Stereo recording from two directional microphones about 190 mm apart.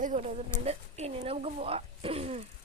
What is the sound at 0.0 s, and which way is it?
Speech, 40° right (ahead or behind).